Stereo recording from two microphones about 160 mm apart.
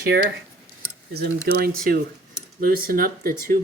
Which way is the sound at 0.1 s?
90° right.